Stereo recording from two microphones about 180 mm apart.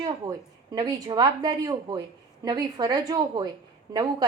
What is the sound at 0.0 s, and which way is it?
A woman's voice, 20° right (ahead or behind).